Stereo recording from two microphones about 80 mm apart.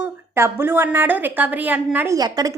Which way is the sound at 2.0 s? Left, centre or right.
Right.